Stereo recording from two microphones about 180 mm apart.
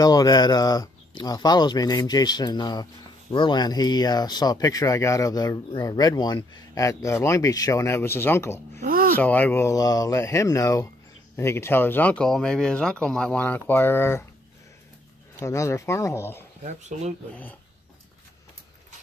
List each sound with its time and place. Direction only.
0.0 s speech: 20° left (ahead or behind)
8.8 s a sound: 50° right (ahead or behind)
9.1 s speech: 10° left (ahead or behind)
15.3 s speech: 15° left (ahead or behind)
16.9 s speech: 40° right (ahead or behind)